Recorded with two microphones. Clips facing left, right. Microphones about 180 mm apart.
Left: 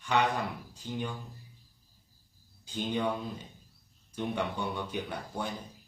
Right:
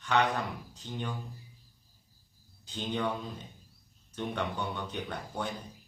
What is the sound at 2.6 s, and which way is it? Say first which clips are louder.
A man's voice: left 2 dB; 10° left (ahead or behind).